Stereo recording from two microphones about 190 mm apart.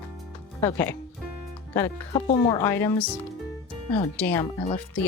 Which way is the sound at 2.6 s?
10° left (ahead or behind).